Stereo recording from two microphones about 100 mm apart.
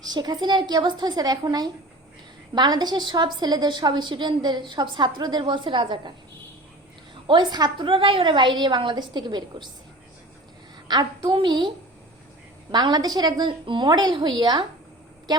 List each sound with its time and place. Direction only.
0.1 s a woman's voice: 45° right (ahead or behind)
7.3 s a woman's voice: 45° right (ahead or behind)
7.9 s a woman's voice: 65° right (ahead or behind)
10.8 s a woman's voice: 45° right (ahead or behind)
12.7 s a woman's voice: 45° right (ahead or behind)
15.3 s a sound: 45° right (ahead or behind)